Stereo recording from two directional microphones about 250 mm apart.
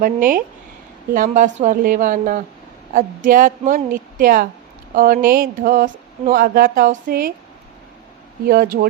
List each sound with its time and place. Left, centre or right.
0.0 s speech: right
8.4 s speech: right